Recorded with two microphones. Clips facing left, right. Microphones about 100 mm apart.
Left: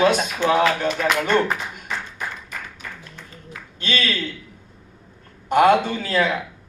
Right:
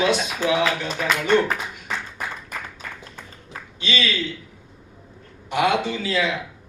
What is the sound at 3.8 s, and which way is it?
Speech, 50° left (ahead or behind).